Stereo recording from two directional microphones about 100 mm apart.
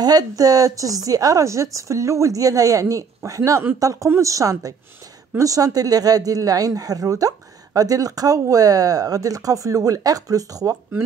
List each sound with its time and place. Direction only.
0.0 s speech: 40° right (ahead or behind)